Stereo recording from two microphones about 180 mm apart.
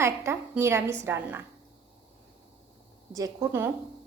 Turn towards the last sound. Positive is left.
turn(degrees=-15)  # may be behind; listen again after turning